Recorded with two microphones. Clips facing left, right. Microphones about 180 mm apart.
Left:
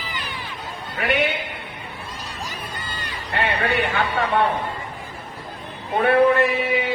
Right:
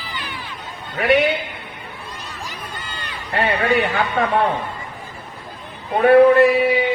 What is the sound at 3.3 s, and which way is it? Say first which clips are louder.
Speech: right 4 dB; 40° right (ahead or behind).